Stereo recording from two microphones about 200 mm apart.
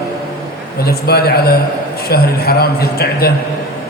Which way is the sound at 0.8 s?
50° left (ahead or behind).